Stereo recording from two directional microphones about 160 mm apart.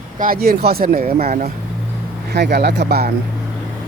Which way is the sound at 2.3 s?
90° right.